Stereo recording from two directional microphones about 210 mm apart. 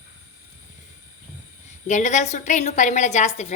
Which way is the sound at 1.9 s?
35° left (ahead or behind).